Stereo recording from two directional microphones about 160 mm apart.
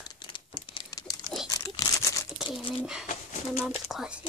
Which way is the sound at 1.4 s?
25° left (ahead or behind).